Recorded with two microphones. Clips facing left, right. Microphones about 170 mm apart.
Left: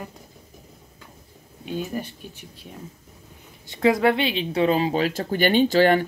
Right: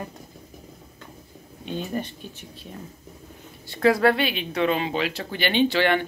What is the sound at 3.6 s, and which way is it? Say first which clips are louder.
Speech: even; 20° left (ahead or behind).